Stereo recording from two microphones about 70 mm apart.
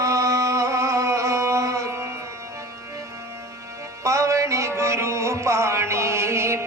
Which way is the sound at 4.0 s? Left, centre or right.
Right.